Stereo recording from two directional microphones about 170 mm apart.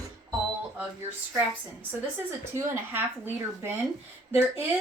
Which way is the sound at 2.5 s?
15° right (ahead or behind).